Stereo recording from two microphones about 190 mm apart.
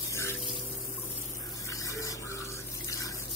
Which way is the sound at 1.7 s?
15° left (ahead or behind).